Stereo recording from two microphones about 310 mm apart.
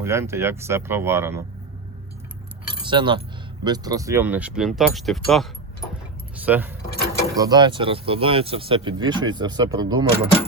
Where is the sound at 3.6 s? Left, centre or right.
Centre.